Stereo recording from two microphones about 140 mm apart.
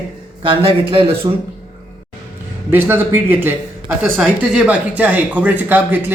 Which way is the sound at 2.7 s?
15° right (ahead or behind).